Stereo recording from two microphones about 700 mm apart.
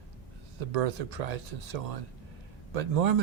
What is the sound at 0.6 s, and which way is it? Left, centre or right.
Speech, right.